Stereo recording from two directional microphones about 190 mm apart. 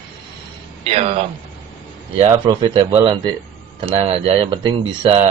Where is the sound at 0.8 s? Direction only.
35° right (ahead or behind).